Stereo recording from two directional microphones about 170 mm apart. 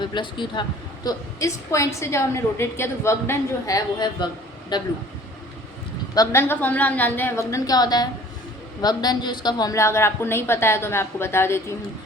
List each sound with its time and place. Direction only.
0.1 s a woman's voice: 25° left (ahead or behind)
6.1 s a woman's voice: 15° left (ahead or behind)